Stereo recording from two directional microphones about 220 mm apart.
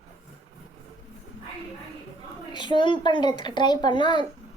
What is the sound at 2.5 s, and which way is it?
A child's voice, 20° left (ahead or behind).